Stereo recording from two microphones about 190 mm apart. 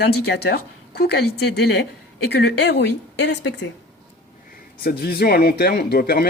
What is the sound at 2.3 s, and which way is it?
A woman's voice, 65° left (ahead or behind).